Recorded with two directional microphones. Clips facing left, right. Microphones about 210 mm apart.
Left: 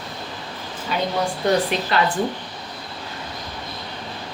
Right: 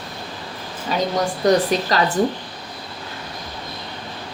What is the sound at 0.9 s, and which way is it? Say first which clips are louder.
A woman's voice: right 2 dB; 40° right (ahead or behind).